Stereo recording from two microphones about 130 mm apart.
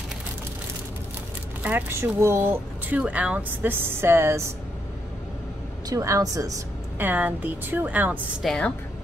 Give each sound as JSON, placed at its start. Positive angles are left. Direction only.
{"t": 1.6, "sound": "speech", "side_deg": -10}
{"t": 5.9, "sound": "speech", "side_deg": -25}
{"t": 7.0, "sound": "speech", "side_deg": -15}
{"t": 8.4, "sound": "a woman's voice", "side_deg": 5}